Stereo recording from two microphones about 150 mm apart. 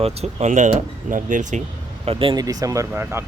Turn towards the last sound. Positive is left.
turn(degrees=-15)  # may be behind; listen again after turning